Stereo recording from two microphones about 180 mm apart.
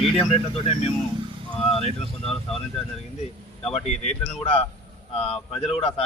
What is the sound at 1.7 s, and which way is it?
Speech, 35° left (ahead or behind).